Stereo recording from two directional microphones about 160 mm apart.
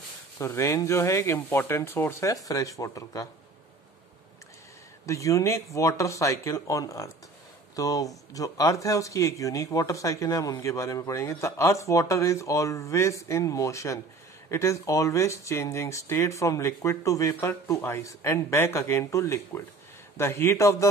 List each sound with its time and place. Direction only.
0.4 s speech: 15° left (ahead or behind)
5.0 s speech: 20° left (ahead or behind)